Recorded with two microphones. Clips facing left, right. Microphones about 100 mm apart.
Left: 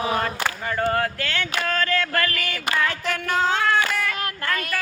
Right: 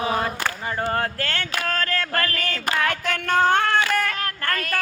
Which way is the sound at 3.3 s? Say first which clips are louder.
Right 2 dB; 60° right (ahead or behind).